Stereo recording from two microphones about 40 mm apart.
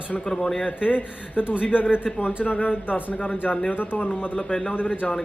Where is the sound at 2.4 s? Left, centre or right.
Left.